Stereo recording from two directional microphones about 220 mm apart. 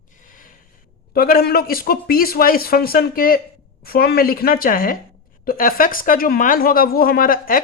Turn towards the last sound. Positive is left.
turn(degrees=40)  # may be behind; listen again after turning